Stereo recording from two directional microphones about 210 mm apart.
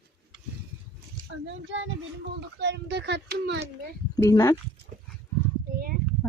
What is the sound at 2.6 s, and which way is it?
A child's voice, 55° right (ahead or behind).